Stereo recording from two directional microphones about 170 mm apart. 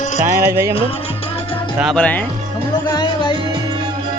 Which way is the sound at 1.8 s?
Centre (ahead or behind).